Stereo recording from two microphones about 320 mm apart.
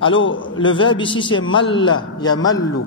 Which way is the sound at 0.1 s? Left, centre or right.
Left.